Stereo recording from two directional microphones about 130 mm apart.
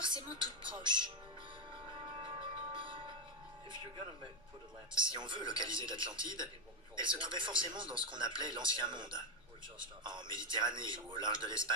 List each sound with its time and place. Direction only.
0.0 s speech: 40° right (ahead or behind)
1.9 s music: 40° right (ahead or behind)
3.7 s speech: 35° right (ahead or behind)